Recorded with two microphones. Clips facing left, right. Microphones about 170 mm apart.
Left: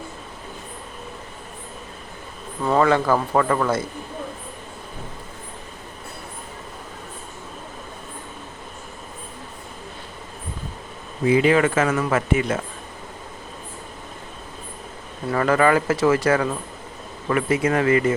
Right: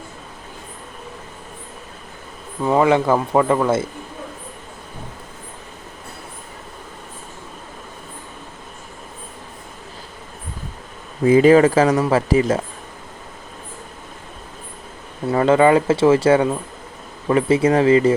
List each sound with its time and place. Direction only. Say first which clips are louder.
2.6 s speech: right 3 dB; 15° right (ahead or behind)
11.3 s speech: right 6 dB; 40° right (ahead or behind)
15.3 s speech: right 4 dB; 25° right (ahead or behind)